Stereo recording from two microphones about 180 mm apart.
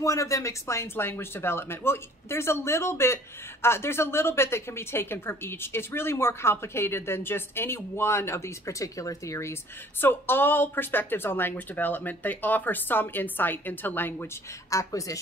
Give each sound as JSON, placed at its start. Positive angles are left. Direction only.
{"t": 0.0, "sound": "a woman's voice", "side_deg": 15}